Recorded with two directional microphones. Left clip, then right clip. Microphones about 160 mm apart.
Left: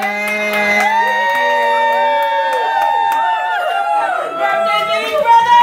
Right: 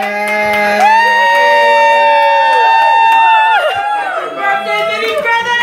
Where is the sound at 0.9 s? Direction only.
20° right (ahead or behind).